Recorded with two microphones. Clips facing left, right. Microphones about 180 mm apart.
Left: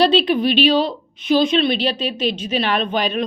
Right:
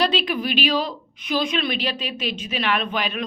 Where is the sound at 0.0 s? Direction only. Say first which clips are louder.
Left 7 dB; 30° left (ahead or behind).